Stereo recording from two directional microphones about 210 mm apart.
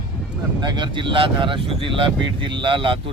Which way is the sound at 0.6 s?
20° right (ahead or behind).